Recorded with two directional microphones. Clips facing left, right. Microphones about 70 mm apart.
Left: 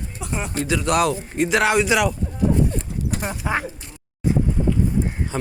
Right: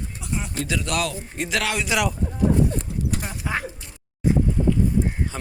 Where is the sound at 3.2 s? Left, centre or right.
Left.